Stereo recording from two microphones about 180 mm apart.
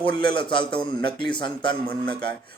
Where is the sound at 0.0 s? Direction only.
25° left (ahead or behind).